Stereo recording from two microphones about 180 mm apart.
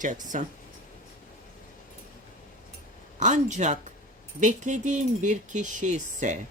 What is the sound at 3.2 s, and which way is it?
Speech, 40° right (ahead or behind).